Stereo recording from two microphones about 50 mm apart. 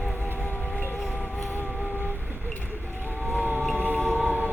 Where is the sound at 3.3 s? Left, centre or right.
Right.